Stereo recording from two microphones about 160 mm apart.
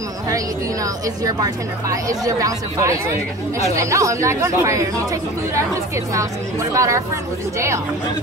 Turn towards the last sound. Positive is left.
turn(degrees=-20)  # may be behind; listen again after turning